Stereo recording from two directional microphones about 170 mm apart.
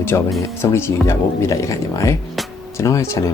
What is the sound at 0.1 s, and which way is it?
Speech, 20° left (ahead or behind).